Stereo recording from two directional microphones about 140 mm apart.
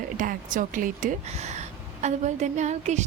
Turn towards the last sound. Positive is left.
turn(degrees=-55)  # may be behind; listen again after turning